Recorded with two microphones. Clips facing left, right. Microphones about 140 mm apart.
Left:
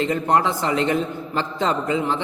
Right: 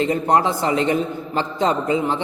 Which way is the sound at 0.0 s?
20° right (ahead or behind).